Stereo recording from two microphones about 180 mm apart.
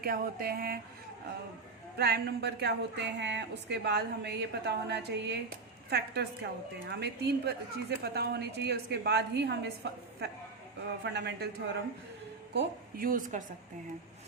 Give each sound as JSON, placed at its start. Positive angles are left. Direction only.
{"t": 0.0, "sound": "speech", "side_deg": -55}
{"t": 2.0, "sound": "speech", "side_deg": -65}
{"t": 12.5, "sound": "a woman's voice", "side_deg": -50}